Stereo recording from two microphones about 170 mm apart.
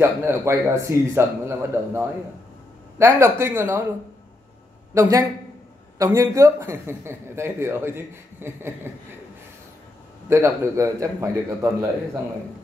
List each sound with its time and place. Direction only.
0.0 s a man's voice: 15° right (ahead or behind)
4.9 s a man's voice: 20° right (ahead or behind)
10.3 s a man's voice: 15° right (ahead or behind)